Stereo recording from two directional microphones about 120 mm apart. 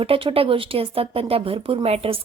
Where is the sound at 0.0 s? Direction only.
50° right (ahead or behind).